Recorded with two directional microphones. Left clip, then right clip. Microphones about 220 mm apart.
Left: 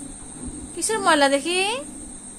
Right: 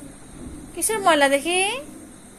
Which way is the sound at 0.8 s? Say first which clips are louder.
Right 1 dB; 10° left (ahead or behind).